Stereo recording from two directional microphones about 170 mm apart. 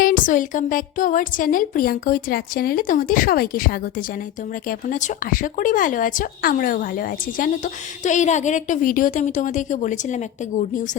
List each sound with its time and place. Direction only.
0.0 s a woman's voice: 50° left (ahead or behind)